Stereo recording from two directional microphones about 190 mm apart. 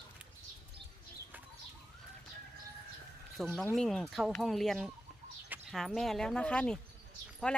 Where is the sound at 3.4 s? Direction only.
Centre (ahead or behind).